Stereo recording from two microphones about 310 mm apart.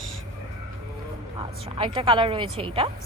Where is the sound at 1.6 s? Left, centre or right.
Centre.